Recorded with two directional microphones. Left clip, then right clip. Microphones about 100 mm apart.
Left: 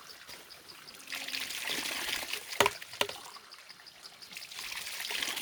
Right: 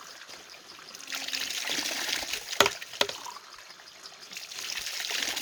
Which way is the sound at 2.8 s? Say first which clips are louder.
Right 5 dB; 15° right (ahead or behind).